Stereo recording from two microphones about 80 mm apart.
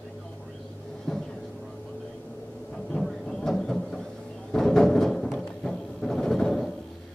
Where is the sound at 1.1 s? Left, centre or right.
Centre.